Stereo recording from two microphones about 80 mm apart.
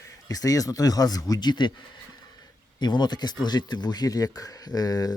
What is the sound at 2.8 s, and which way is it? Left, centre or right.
Speech, left.